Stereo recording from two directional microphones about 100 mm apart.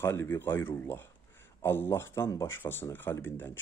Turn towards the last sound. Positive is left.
turn(degrees=20)  # may be behind; listen again after turning